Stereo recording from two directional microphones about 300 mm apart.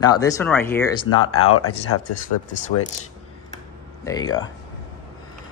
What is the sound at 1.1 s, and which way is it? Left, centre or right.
Speech, left.